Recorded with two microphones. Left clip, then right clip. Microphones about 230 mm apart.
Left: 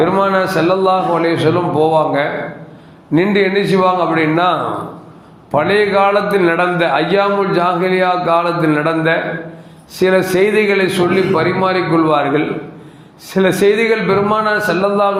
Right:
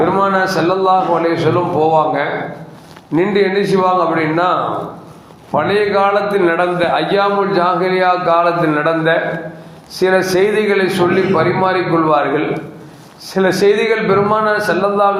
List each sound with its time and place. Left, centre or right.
0.0 s a man's voice: left
13.3 s a man's voice: left